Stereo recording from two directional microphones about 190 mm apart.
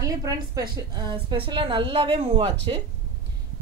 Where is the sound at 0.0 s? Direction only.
20° right (ahead or behind).